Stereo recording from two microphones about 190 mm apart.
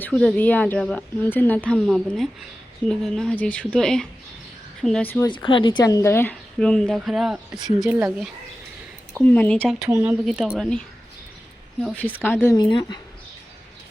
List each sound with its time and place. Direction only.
0.0 s speech: 5° left (ahead or behind)
5.3 s speech: 25° left (ahead or behind); by 7.9 s centre (ahead or behind)
9.2 s speech: 5° left (ahead or behind)
9.7 s speech: 5° right (ahead or behind); by 13.0 s 25° left (ahead or behind)